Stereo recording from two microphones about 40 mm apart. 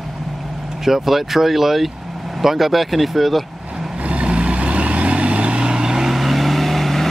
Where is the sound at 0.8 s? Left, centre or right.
Centre.